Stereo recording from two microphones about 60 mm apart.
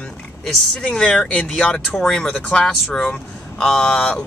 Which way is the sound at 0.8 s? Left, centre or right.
Centre.